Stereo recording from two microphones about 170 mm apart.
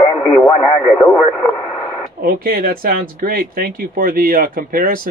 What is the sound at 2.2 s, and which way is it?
Speech, 60° right (ahead or behind).